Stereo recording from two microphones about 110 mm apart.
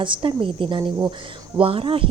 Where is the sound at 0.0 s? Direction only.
50° right (ahead or behind).